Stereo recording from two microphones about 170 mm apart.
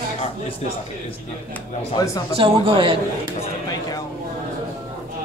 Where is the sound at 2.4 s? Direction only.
30° right (ahead or behind).